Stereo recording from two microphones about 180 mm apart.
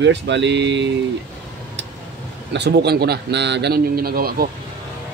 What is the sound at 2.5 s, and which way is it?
A man's voice, 70° right (ahead or behind).